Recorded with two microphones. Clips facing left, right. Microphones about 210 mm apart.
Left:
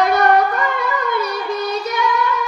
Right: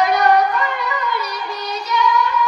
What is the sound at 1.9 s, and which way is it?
Music, 50° left (ahead or behind).